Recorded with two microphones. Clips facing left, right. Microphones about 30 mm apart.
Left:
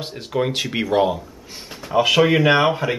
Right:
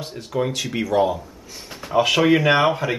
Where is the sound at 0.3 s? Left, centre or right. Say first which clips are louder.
Left 2 dB; left.